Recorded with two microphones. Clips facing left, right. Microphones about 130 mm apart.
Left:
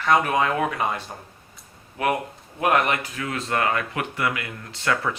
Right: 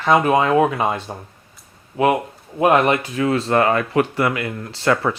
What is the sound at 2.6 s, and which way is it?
Speech, 25° right (ahead or behind).